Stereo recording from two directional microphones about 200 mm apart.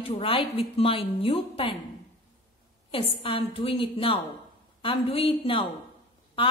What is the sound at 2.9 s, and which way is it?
A woman's voice, 25° left (ahead or behind).